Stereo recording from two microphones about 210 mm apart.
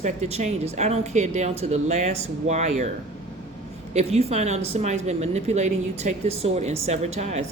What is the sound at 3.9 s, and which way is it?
Speech, 30° right (ahead or behind).